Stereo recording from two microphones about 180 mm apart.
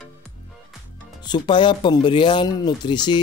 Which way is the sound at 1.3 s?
25° left (ahead or behind).